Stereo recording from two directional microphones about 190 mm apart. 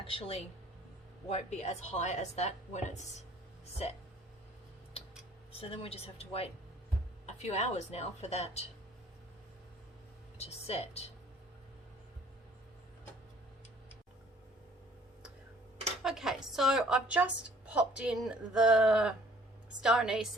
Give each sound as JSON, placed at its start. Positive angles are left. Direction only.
{"t": 0.0, "sound": "a woman's voice", "side_deg": 30}
{"t": 5.5, "sound": "a woman's voice", "side_deg": 30}
{"t": 10.3, "sound": "a woman's voice", "side_deg": 35}
{"t": 16.0, "sound": "a woman's voice", "side_deg": 0}